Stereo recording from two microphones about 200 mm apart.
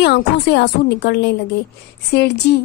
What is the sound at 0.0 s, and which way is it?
A woman's voice, 55° left (ahead or behind).